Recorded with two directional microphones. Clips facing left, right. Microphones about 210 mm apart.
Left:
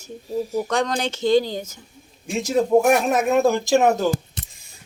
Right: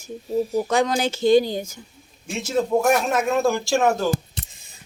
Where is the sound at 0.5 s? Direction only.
5° right (ahead or behind).